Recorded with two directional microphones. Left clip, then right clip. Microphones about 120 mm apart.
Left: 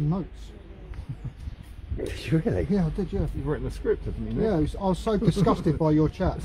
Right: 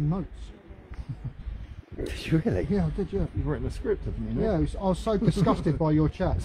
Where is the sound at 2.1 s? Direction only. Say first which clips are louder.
Even; 40° right (ahead or behind).